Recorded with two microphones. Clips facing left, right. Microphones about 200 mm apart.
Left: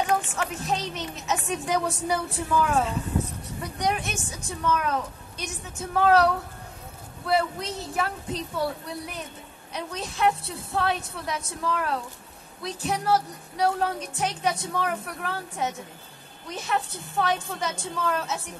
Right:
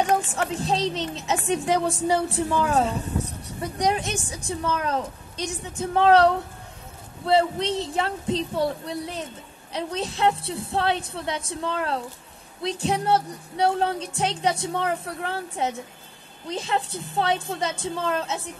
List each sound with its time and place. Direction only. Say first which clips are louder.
0.0 s speech: right 3 dB; 35° right (ahead or behind)